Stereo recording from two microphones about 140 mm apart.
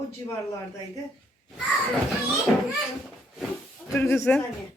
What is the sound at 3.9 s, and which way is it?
Speech, 15° left (ahead or behind).